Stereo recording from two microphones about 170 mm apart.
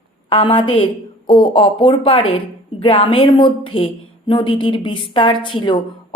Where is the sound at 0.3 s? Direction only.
30° left (ahead or behind).